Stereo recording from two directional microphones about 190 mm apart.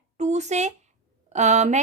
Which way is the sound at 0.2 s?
35° right (ahead or behind).